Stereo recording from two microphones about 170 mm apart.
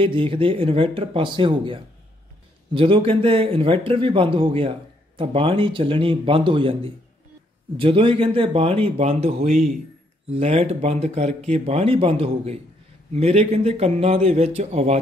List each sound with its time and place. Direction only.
0.0 s speech: 30° right (ahead or behind)